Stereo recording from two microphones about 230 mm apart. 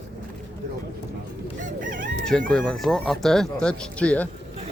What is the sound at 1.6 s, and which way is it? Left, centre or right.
Crowing, right.